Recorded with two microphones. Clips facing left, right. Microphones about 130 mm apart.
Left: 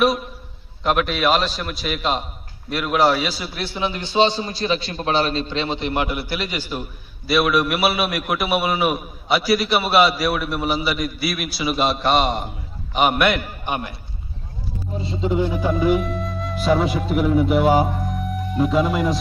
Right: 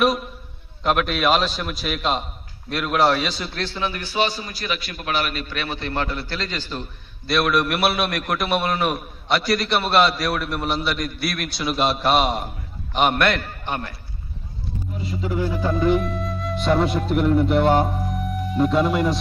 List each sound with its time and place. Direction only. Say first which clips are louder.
0.0 s a man's voice: left 1 dB; centre (ahead or behind)
15.0 s a man's voice: left 4 dB; 25° left (ahead or behind)
15.7 s speech: right 1 dB; 5° left (ahead or behind)